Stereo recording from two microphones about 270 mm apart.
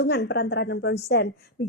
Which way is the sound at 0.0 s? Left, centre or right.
Left.